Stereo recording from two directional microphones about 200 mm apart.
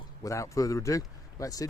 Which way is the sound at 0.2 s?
15° left (ahead or behind).